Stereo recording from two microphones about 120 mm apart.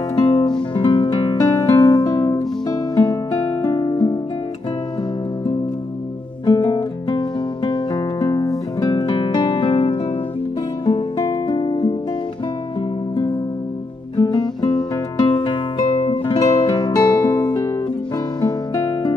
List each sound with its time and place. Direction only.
0.1 s music: 35° left (ahead or behind)
1.5 s music: 25° left (ahead or behind)
2.9 s music: 30° left (ahead or behind)
6.4 s music: 30° left (ahead or behind)
14.1 s music: 35° left (ahead or behind)